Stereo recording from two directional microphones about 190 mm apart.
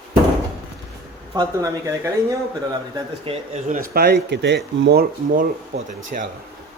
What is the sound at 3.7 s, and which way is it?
Speech, 50° right (ahead or behind).